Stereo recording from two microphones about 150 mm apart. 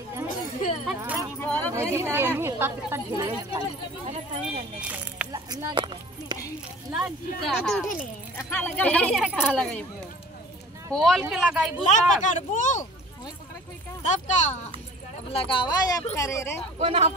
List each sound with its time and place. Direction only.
0.8 s a sound: 10° right (ahead or behind)
1.4 s a sound: 10° left (ahead or behind)
1.8 s speech: 15° right (ahead or behind)
4.0 s speech: 50° right (ahead or behind)
4.8 s speech: 5° right (ahead or behind)
5.3 s speech: 25° right (ahead or behind)
6.9 s speech: 5° right (ahead or behind)
8.4 s speech: 15° left (ahead or behind)
11.1 s speech: 5° right (ahead or behind)
11.9 s speech: 55° left (ahead or behind)
14.0 s speech: 50° left (ahead or behind)
15.3 s speech: 35° left (ahead or behind); by 16.6 s 20° left (ahead or behind)
16.8 s speech: 35° right (ahead or behind)